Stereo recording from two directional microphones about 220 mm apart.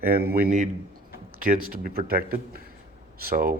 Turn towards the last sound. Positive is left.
turn(degrees=-40)  # may be behind; listen again after turning